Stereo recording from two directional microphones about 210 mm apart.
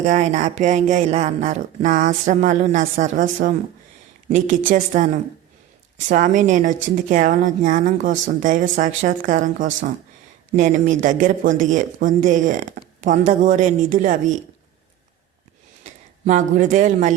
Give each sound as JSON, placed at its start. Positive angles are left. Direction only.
{"t": 0.0, "sound": "speech", "side_deg": -35}
{"t": 15.8, "sound": "speech", "side_deg": -35}